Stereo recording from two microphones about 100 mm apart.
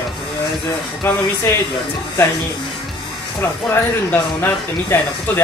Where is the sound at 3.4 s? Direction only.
25° left (ahead or behind).